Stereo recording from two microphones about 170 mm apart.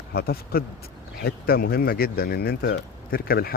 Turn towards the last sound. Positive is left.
turn(degrees=60)  # may be behind; listen again after turning